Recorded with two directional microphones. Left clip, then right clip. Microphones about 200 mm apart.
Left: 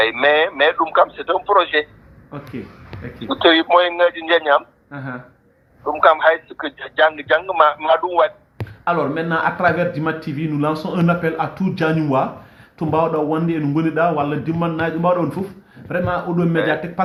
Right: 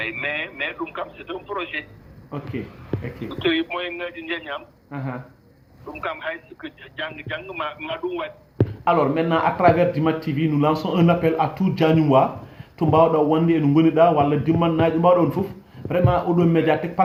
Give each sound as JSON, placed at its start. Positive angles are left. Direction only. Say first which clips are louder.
{"t": 0.0, "sound": "a man's voice", "louder": "left 11 dB", "side_deg": 60}
{"t": 2.3, "sound": "a man's voice", "louder": "right 1 dB", "side_deg": 0}
{"t": 3.2, "sound": "a man's voice", "louder": "left 10 dB", "side_deg": 65}
{"t": 4.9, "sound": "a man's voice", "louder": "left 2 dB", "side_deg": 0}
{"t": 5.9, "sound": "a man's voice", "louder": "left 16 dB", "side_deg": 60}
{"t": 8.8, "sound": "a man's voice", "louder": "even", "side_deg": 0}